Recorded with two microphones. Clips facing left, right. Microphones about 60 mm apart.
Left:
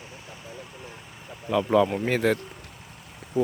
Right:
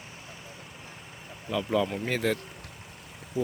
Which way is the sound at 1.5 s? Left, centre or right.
Left.